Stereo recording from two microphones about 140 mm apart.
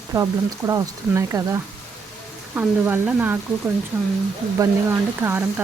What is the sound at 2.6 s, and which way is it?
Speech, 15° right (ahead or behind).